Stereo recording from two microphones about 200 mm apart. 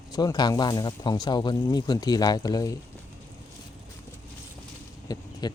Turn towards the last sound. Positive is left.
turn(degrees=20)  # may be behind; listen again after turning